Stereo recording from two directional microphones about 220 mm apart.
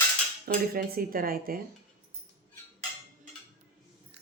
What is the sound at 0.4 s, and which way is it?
Speech, 40° right (ahead or behind).